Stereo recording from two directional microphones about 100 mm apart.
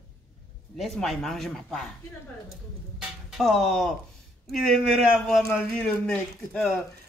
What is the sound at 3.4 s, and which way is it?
Speech, centre (ahead or behind).